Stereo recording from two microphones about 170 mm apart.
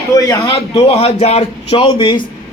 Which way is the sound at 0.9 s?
40° left (ahead or behind).